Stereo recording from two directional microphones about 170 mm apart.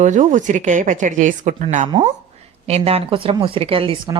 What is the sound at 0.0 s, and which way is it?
A woman's voice, 45° right (ahead or behind).